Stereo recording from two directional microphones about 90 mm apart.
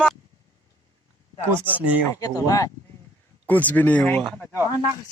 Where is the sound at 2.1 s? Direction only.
40° left (ahead or behind).